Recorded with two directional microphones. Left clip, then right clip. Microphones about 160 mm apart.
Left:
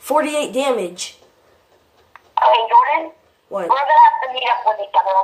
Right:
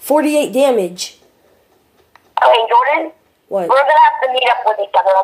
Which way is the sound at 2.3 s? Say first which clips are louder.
Right 2 dB; 30° right (ahead or behind).